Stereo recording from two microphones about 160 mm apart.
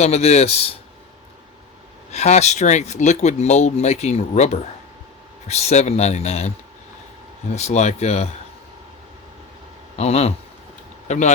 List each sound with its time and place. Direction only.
0.0 s speech: 45° left (ahead or behind)
2.1 s speech: 45° left (ahead or behind)
7.5 s speech: 45° left (ahead or behind)
10.0 s speech: 40° left (ahead or behind)